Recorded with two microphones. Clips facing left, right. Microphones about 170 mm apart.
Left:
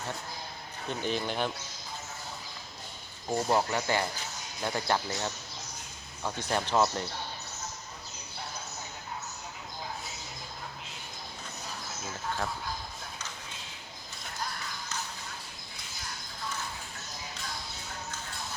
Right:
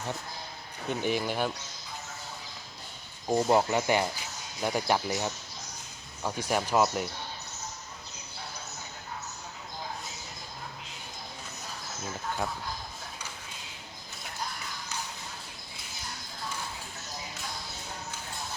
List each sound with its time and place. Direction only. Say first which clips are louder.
0.9 s speech: right 3 dB; 15° right (ahead or behind)
3.2 s speech: right 3 dB; 20° right (ahead or behind)